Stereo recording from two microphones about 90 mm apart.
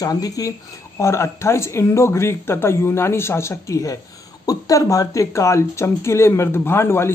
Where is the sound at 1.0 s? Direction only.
30° left (ahead or behind).